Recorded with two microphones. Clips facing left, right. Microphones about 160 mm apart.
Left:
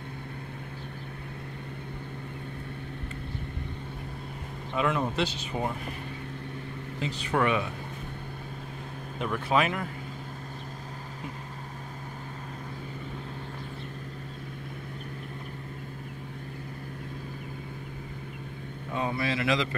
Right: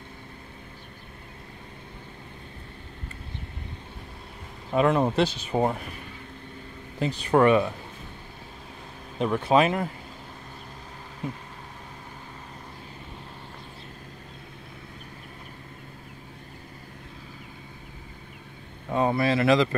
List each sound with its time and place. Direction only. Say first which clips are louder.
4.7 s speech: right 6 dB; 40° right (ahead or behind)
7.0 s speech: right 7 dB; 45° right (ahead or behind)
9.2 s speech: right 5 dB; 30° right (ahead or behind)
18.9 s speech: right 7 dB; 45° right (ahead or behind)